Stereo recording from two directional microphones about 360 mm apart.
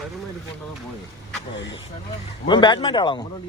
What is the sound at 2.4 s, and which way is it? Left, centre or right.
Speech, centre.